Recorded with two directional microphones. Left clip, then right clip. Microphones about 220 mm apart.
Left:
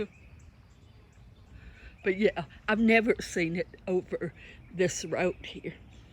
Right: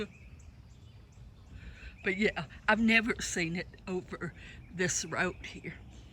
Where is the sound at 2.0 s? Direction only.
10° left (ahead or behind).